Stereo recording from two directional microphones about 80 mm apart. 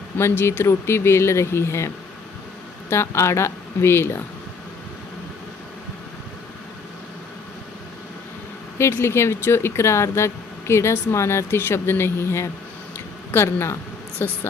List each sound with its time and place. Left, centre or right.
0.2 s speech: left
2.9 s speech: left
8.8 s a woman's voice: left